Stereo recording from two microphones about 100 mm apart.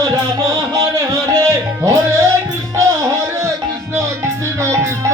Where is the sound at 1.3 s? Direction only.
30° right (ahead or behind).